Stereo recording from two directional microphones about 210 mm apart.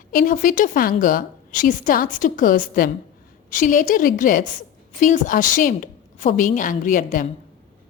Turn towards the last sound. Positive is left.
turn(degrees=40)  # may be behind; listen again after turning